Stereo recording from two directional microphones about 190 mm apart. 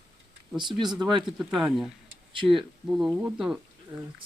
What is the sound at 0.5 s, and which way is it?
Speech, 25° right (ahead or behind).